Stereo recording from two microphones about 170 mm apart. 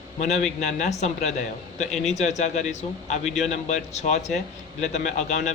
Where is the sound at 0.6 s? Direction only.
45° left (ahead or behind).